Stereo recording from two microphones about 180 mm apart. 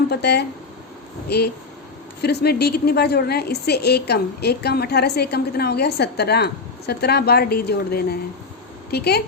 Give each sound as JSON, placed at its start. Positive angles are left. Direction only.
{"t": 0.1, "sound": "a woman's voice", "side_deg": 65}